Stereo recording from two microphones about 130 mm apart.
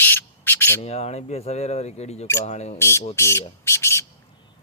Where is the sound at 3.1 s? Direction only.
20° left (ahead or behind).